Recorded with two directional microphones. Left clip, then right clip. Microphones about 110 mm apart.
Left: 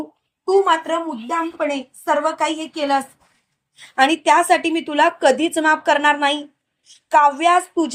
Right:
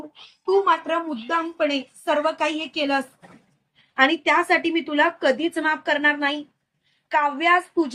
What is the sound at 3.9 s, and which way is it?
A woman's voice, 55° left (ahead or behind).